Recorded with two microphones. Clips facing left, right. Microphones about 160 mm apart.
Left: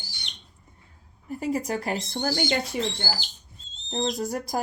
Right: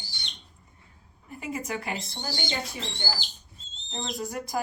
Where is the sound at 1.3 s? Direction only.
35° left (ahead or behind).